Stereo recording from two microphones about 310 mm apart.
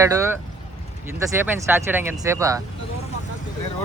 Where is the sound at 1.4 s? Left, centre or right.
Centre.